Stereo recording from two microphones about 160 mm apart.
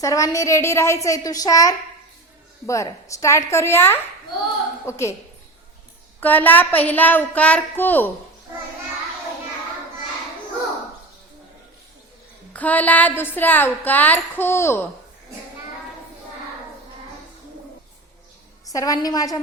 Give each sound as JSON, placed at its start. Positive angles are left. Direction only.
{"t": 0.0, "sound": "a woman's voice", "side_deg": 20}
{"t": 6.1, "sound": "a woman's voice", "side_deg": 10}
{"t": 12.5, "sound": "a woman's voice", "side_deg": 10}
{"t": 18.7, "sound": "a woman's voice", "side_deg": 20}